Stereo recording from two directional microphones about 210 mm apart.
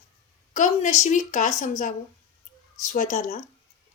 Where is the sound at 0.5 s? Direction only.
35° left (ahead or behind).